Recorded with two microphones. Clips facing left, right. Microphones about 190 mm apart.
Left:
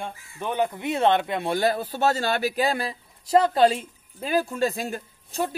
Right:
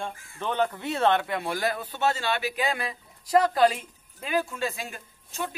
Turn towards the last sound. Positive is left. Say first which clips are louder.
# left 6 dB
turn(degrees=40)  # may be behind; listen again after turning